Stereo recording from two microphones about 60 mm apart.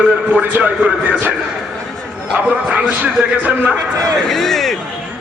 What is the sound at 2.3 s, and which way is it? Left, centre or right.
Speech, right.